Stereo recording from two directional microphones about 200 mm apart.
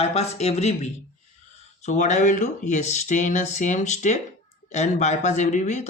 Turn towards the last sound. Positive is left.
turn(degrees=35)  # may be behind; listen again after turning